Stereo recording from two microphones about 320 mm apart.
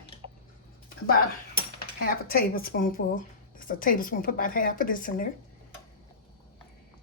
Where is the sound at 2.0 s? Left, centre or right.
Left.